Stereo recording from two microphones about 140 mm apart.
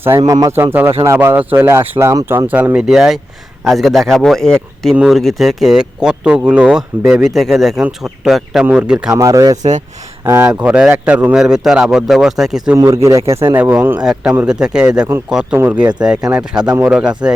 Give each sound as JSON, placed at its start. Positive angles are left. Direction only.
{"t": 0.2, "sound": "speech", "side_deg": -25}
{"t": 9.0, "sound": "a man's voice", "side_deg": -25}
{"t": 12.7, "sound": "a man's voice", "side_deg": -20}
{"t": 15.5, "sound": "speech", "side_deg": -15}
{"t": 16.6, "sound": "a man's voice", "side_deg": -30}
{"t": 16.8, "sound": "speech", "side_deg": -5}